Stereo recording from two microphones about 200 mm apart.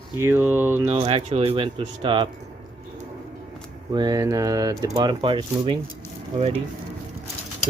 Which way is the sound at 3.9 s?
20° right (ahead or behind).